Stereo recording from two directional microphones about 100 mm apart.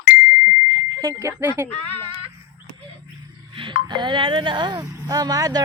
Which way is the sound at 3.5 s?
55° right (ahead or behind).